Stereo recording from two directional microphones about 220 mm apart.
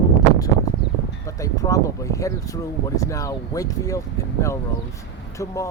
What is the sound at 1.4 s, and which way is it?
Speech, 15° left (ahead or behind).